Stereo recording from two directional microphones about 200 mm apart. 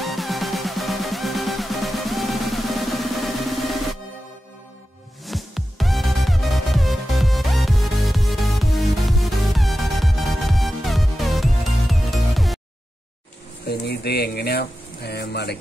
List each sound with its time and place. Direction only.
0.0 s music: centre (ahead or behind)
5.2 s music: centre (ahead or behind)
13.7 s a sound: 55° left (ahead or behind)